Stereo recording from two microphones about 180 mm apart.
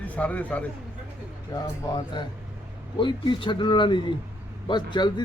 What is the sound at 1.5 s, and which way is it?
Speech, 20° left (ahead or behind).